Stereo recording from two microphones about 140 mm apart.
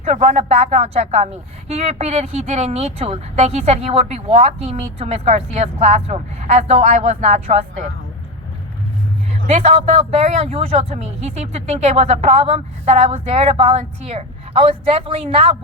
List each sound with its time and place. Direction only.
0.0 s speech: 50° right (ahead or behind)
9.6 s speech: 50° right (ahead or behind)